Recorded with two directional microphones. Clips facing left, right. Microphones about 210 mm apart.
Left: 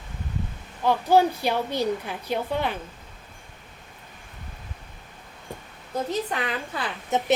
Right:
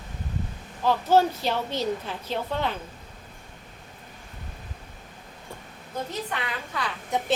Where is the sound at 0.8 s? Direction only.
15° left (ahead or behind).